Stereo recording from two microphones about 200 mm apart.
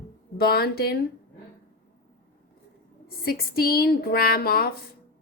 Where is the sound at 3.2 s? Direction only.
50° left (ahead or behind).